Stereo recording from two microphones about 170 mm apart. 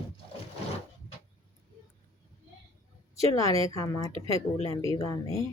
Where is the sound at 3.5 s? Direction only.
20° left (ahead or behind).